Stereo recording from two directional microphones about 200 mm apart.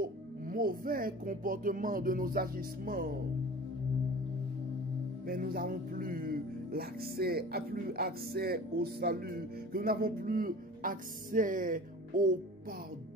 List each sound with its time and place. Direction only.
0.0 s music: 45° right (ahead or behind)
5.2 s music: 45° right (ahead or behind)